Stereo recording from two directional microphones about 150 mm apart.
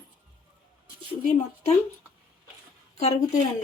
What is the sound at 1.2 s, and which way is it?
Speech, 50° left (ahead or behind).